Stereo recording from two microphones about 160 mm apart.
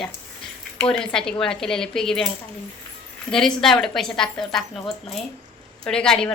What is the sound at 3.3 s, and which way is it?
A woman's voice, centre (ahead or behind).